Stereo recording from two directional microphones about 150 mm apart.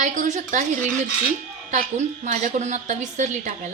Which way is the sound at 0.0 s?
60° right (ahead or behind).